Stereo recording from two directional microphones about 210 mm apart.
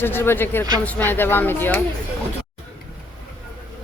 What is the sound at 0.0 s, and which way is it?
Speech, 10° left (ahead or behind).